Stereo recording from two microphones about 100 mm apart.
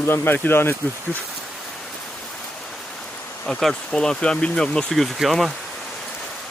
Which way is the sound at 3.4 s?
5° left (ahead or behind).